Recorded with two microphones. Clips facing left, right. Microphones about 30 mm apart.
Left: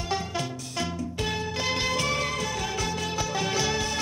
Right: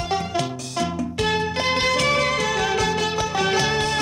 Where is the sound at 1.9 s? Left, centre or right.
Right.